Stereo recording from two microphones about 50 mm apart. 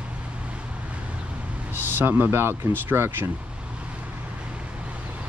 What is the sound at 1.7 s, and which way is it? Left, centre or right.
Speech, right.